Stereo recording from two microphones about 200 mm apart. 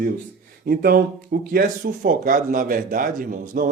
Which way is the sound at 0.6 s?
45° right (ahead or behind).